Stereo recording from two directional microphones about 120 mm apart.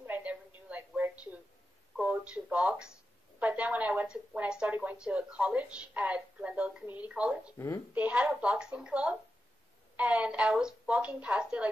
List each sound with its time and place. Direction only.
0.0 s a sound: 15° right (ahead or behind)
2.0 s a woman's voice: 10° right (ahead or behind)
7.5 s a woman's voice: 20° left (ahead or behind)
7.9 s a woman's voice: 10° right (ahead or behind)